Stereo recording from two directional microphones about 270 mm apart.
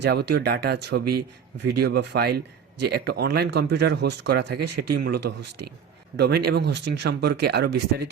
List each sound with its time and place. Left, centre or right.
0.0 s speech: right
5.2 s speech: right
6.1 s speech: right